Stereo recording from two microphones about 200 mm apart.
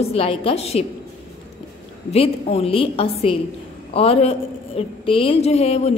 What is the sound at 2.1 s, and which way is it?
A woman's voice, 30° left (ahead or behind).